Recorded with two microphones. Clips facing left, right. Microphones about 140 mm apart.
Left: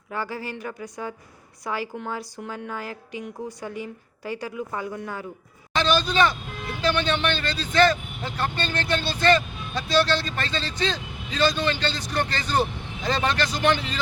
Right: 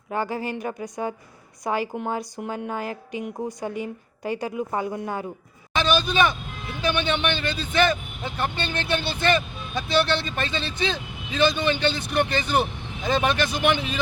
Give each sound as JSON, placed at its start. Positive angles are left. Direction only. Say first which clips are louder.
{"t": 0.1, "sound": "a woman's voice", "louder": "right 4 dB", "side_deg": -20}
{"t": 5.7, "sound": "a sound", "louder": "even", "side_deg": -15}
{"t": 6.8, "sound": "a man's voice", "louder": "even", "side_deg": -15}